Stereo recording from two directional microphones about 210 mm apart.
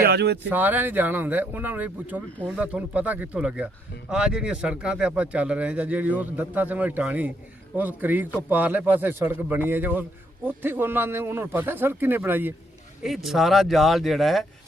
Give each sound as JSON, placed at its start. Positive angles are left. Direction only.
{"t": 0.0, "sound": "speech", "side_deg": -50}
{"t": 0.5, "sound": "speech", "side_deg": -10}